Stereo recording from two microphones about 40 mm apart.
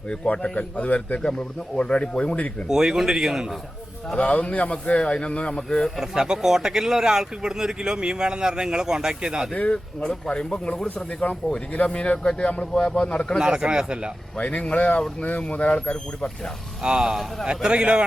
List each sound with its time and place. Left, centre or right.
0.5 s speech: left
1.2 s a man's voice: left
2.6 s speech: centre
4.3 s a man's voice: left
5.5 s speech: centre
6.0 s speech: centre
9.7 s a man's voice: centre
11.2 s a man's voice: left
13.4 s speech: right
14.3 s speech: left
16.8 s speech: centre